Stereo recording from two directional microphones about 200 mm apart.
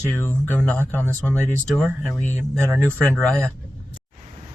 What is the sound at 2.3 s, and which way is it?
Speech, 10° right (ahead or behind).